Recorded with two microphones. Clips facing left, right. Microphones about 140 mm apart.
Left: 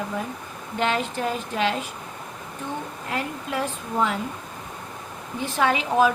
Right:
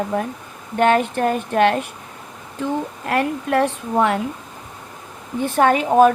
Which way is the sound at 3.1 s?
65° right (ahead or behind).